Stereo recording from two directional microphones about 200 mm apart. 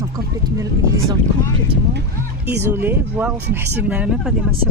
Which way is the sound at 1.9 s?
55° right (ahead or behind).